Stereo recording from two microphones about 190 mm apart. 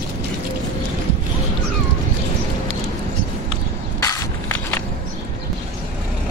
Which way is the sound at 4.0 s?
15° left (ahead or behind).